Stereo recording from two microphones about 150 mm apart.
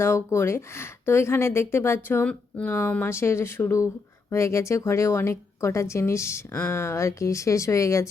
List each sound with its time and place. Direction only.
0.0 s speech: 15° left (ahead or behind)